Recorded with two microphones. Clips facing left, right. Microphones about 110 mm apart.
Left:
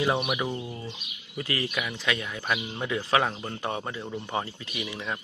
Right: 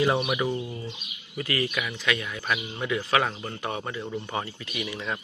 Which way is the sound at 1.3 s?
25° left (ahead or behind).